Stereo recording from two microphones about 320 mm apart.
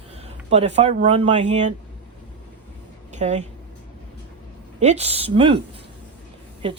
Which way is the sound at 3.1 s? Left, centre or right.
Right.